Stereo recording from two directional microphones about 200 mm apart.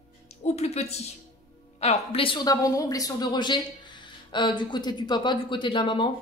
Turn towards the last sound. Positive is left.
turn(degrees=25)  # may be behind; listen again after turning